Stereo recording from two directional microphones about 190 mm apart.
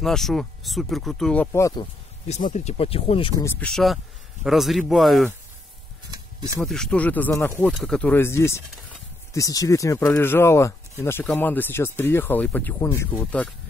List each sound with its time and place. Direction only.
0.0 s speech: centre (ahead or behind)
2.2 s speech: 35° left (ahead or behind)
3.4 s speech: 5° left (ahead or behind)
6.1 s a sound: 15° right (ahead or behind)
6.6 s speech: centre (ahead or behind)